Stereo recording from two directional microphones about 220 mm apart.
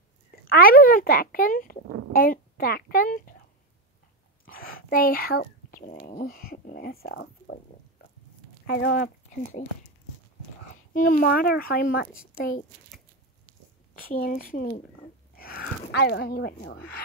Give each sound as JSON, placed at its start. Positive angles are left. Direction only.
{"t": 0.5, "sound": "a child's voice", "side_deg": 40}
{"t": 4.7, "sound": "speech", "side_deg": 40}
{"t": 8.0, "sound": "a sound", "side_deg": 45}
{"t": 8.6, "sound": "speech", "side_deg": 45}
{"t": 10.9, "sound": "a child's voice", "side_deg": 40}
{"t": 13.9, "sound": "speech", "side_deg": 40}